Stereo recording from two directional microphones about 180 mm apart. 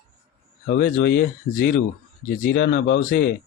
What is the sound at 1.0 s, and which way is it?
Speech, 60° left (ahead or behind).